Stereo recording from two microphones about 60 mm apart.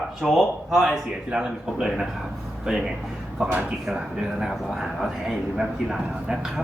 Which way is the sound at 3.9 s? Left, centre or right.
Centre.